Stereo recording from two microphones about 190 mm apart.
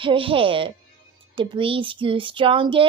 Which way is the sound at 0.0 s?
25° right (ahead or behind).